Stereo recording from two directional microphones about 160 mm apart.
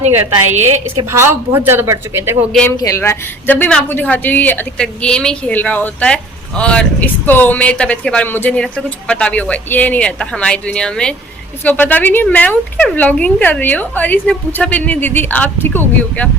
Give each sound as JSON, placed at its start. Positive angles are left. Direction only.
{"t": 0.1, "sound": "speech", "side_deg": -15}
{"t": 2.6, "sound": "speech", "side_deg": 20}